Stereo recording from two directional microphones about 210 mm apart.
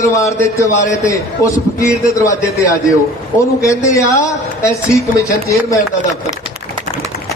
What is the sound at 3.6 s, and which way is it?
A man's voice, 15° left (ahead or behind).